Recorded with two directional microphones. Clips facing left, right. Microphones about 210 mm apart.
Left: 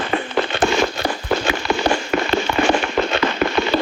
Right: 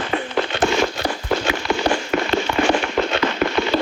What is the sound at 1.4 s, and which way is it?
Fireworks, 55° left (ahead or behind).